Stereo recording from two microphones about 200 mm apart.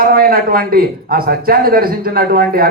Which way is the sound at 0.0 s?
45° right (ahead or behind).